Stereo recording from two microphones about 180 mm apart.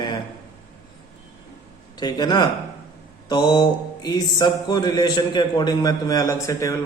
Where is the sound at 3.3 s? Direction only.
25° left (ahead or behind).